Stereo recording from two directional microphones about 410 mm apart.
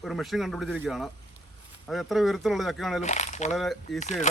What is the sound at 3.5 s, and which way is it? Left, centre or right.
Speech, centre.